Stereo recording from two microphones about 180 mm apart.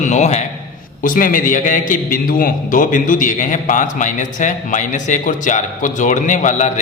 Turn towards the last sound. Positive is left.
turn(degrees=45)  # may be behind; listen again after turning